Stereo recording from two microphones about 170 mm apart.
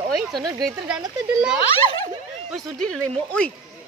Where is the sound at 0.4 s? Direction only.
25° right (ahead or behind).